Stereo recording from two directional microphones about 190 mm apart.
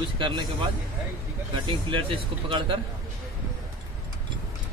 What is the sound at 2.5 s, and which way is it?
Speech, 25° right (ahead or behind).